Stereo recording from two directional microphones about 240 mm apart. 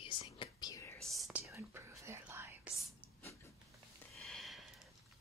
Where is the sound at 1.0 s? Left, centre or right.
Centre.